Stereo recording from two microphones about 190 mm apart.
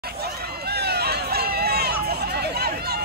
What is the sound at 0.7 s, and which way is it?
Run, 60° right (ahead or behind).